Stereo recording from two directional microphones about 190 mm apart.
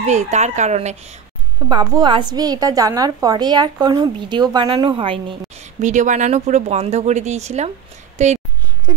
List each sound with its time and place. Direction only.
0.0 s speech: 35° right (ahead or behind)
1.7 s a woman's voice: 25° right (ahead or behind)
5.8 s speech: 40° right (ahead or behind)